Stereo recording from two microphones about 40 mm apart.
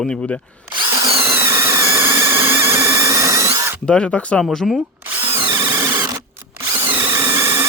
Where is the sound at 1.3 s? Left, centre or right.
Right.